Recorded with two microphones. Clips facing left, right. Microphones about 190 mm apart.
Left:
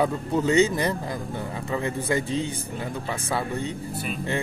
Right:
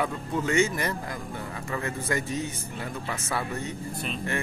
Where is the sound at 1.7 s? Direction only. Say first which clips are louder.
Left 4 dB; 20° left (ahead or behind).